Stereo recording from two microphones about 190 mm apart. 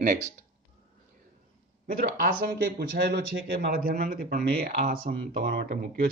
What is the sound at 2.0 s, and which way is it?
Speech, 50° right (ahead or behind).